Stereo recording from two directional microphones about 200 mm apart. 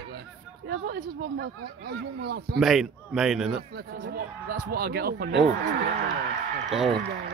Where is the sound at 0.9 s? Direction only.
50° right (ahead or behind).